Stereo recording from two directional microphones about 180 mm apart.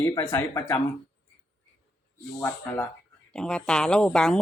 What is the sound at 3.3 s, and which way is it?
Speech, 5° left (ahead or behind).